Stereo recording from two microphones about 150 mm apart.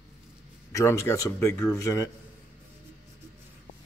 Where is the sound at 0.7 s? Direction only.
20° left (ahead or behind).